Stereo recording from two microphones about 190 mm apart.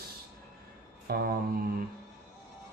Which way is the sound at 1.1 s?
55° right (ahead or behind).